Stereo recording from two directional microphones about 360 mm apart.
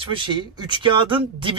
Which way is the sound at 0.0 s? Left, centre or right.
Centre.